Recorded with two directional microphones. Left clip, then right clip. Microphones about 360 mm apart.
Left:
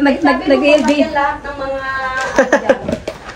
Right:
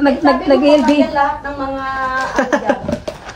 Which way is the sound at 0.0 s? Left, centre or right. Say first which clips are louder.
Even; centre.